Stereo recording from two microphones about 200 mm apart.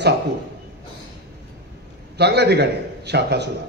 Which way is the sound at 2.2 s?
55° right (ahead or behind).